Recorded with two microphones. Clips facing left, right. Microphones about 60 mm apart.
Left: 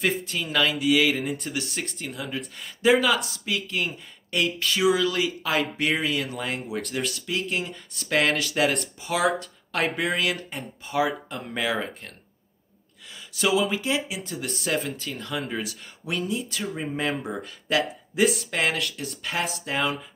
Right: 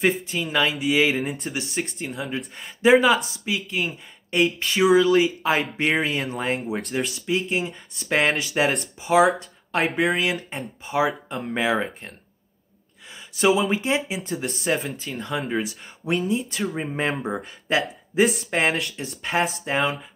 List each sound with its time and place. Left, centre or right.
0.0 s speech: right
9.4 s a sound: right
9.8 s speech: centre
10.5 s speech: right
13.4 s speech: right